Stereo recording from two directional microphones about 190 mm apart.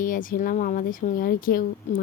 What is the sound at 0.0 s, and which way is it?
Speech, 45° left (ahead or behind).